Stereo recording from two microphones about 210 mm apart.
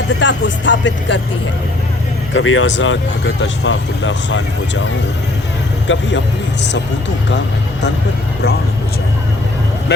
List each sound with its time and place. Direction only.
0.2 s speech: 60° left (ahead or behind)
2.3 s speech: 70° left (ahead or behind)
5.9 s speech: 60° left (ahead or behind)